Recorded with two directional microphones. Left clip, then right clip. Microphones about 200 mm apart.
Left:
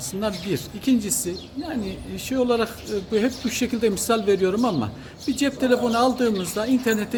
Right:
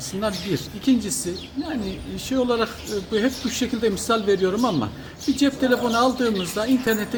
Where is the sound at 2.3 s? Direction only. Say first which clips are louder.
Even; 20° left (ahead or behind).